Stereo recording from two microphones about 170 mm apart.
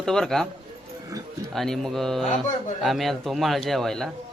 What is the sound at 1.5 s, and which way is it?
Speech, centre (ahead or behind).